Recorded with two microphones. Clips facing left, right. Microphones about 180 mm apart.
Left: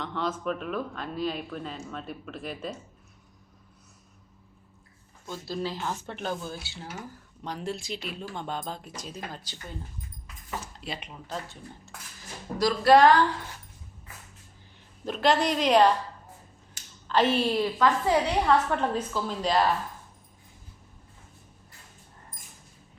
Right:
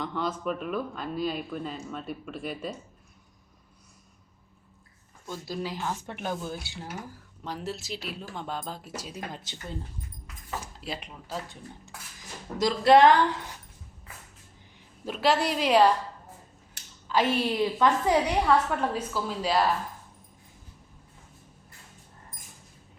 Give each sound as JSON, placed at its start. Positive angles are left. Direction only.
{"t": 0.0, "sound": "speech", "side_deg": -5}
{"t": 5.2, "sound": "speech", "side_deg": -15}
{"t": 7.4, "sound": "speech", "side_deg": -5}
{"t": 9.3, "sound": "speech", "side_deg": -25}
{"t": 10.8, "sound": "speech", "side_deg": 0}
{"t": 12.5, "sound": "speech", "side_deg": -20}
{"t": 15.0, "sound": "speech", "side_deg": -5}
{"t": 17.1, "sound": "speech", "side_deg": -10}